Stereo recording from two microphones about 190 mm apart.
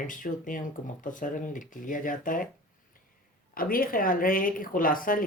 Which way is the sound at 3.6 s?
50° left (ahead or behind).